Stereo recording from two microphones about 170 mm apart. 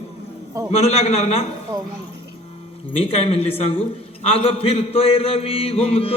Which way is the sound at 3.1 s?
35° left (ahead or behind).